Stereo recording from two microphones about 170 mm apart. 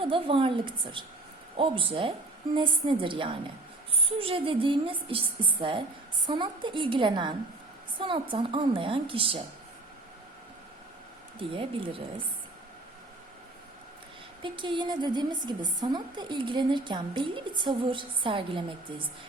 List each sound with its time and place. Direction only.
0.0 s a woman's voice: 30° right (ahead or behind)
11.3 s a woman's voice: 30° right (ahead or behind)
14.4 s a woman's voice: 30° right (ahead or behind)